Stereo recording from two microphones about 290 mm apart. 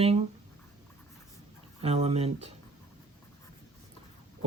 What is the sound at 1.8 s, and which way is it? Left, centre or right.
Speech, right.